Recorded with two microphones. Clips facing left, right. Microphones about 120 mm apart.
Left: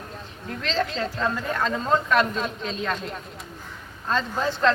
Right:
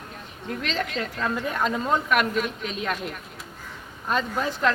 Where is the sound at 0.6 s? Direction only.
30° left (ahead or behind).